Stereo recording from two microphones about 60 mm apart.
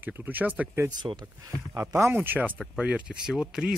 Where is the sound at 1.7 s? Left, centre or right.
Right.